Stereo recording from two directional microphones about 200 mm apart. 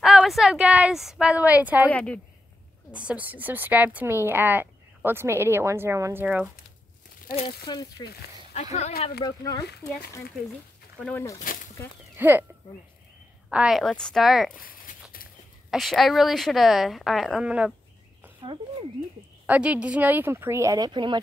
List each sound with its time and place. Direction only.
0.0 s a woman's voice: 5° right (ahead or behind)
1.9 s speech: 5° left (ahead or behind)
2.9 s a woman's voice: 5° right (ahead or behind)
7.3 s speech: 20° left (ahead or behind)
9.2 s speech: 20° left (ahead or behind)
11.0 s speech: 10° left (ahead or behind)
12.2 s a woman's voice: 10° right (ahead or behind)
13.5 s a woman's voice: 5° right (ahead or behind)
14.6 s a sound: 45° left (ahead or behind)
15.7 s a woman's voice: centre (ahead or behind)
19.4 s a woman's voice: 5° right (ahead or behind); by 21.2 s 25° right (ahead or behind)